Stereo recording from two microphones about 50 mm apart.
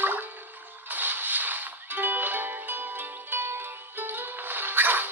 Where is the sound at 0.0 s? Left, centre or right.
Right.